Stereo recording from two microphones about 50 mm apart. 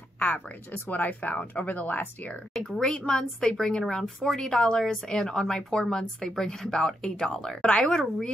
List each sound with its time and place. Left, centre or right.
0.8 s speech: left
2.5 s speech: centre